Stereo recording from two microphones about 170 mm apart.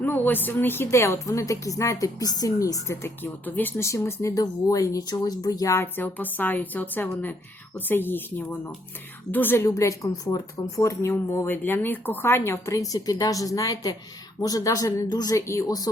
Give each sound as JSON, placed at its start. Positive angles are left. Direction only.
{"t": 0.0, "sound": "speech", "side_deg": 10}